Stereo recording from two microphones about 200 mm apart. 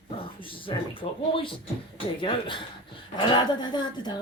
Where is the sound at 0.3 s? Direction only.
25° left (ahead or behind).